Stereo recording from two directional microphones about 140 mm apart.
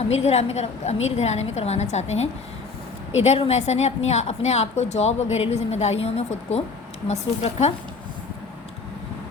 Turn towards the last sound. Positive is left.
turn(degrees=50)  # may be behind; listen again after turning